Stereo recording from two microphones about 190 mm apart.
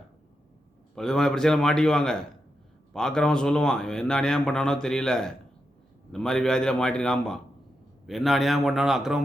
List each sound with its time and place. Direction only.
0.9 s speech: 5° left (ahead or behind)